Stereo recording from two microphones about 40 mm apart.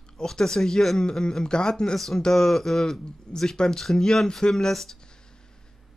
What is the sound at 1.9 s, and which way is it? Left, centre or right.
Speech, centre.